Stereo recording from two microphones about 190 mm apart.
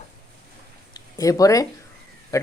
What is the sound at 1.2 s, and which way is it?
Speech, 15° left (ahead or behind).